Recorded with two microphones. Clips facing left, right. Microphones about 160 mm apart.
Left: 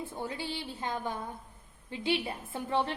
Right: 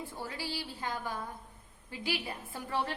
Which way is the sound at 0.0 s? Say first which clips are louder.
Left 3 dB; 20° left (ahead or behind).